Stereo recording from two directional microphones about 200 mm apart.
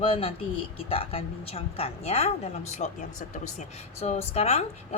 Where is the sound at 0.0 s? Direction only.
25° left (ahead or behind).